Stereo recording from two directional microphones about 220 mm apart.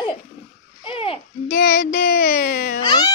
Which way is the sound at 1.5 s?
45° left (ahead or behind).